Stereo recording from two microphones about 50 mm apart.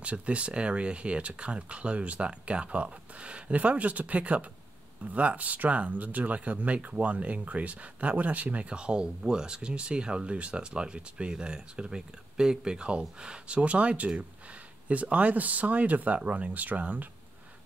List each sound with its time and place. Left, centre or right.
0.0 s speech: right